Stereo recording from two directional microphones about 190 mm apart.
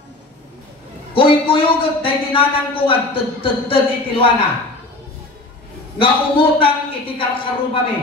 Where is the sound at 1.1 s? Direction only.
30° left (ahead or behind).